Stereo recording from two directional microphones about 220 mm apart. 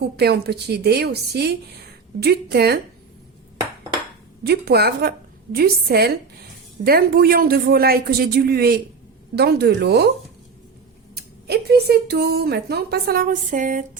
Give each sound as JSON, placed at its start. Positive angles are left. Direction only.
{"t": 0.2, "sound": "speech", "side_deg": -45}
{"t": 4.4, "sound": "speech", "side_deg": -45}
{"t": 11.1, "sound": "speech", "side_deg": -45}